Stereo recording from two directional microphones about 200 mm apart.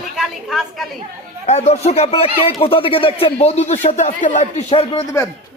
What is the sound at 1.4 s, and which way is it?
Speech, 35° left (ahead or behind).